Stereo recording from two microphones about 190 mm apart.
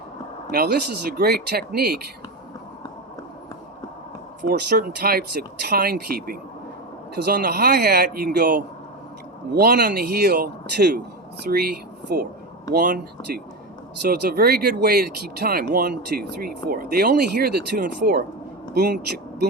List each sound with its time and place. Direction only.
0.5 s speech: 55° right (ahead or behind)
4.4 s speech: 55° right (ahead or behind)